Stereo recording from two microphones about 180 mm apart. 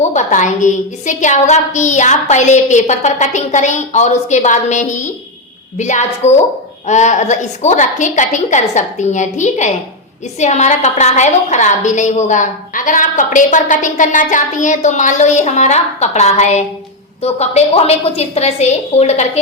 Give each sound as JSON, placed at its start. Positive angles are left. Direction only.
{"t": 0.0, "sound": "a woman's voice", "side_deg": 40}